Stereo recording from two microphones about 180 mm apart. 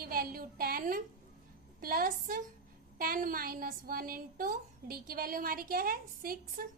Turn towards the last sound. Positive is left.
turn(degrees=-55)  # may be behind; listen again after turning